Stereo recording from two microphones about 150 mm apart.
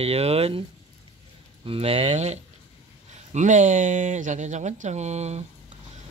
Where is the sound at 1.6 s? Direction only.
40° right (ahead or behind).